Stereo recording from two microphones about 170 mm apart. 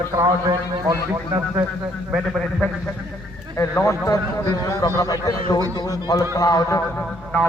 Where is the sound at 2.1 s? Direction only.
Centre (ahead or behind).